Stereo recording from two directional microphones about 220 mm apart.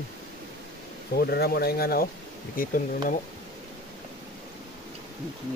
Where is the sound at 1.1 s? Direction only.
45° left (ahead or behind).